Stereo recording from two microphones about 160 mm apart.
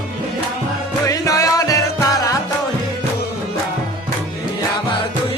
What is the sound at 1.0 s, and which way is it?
Music, 20° left (ahead or behind).